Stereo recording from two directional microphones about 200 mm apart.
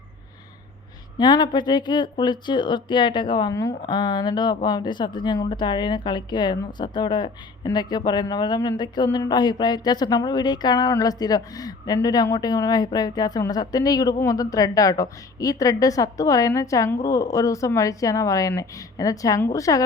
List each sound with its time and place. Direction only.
1.2 s a woman's voice: 20° left (ahead or behind)